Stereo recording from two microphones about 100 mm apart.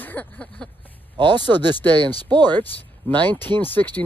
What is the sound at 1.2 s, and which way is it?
Speech, 50° right (ahead or behind).